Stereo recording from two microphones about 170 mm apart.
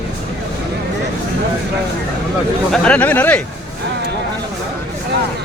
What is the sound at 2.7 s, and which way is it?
Speech, 5° left (ahead or behind).